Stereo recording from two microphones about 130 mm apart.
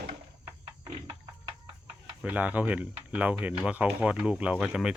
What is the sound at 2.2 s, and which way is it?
Speech, 10° right (ahead or behind).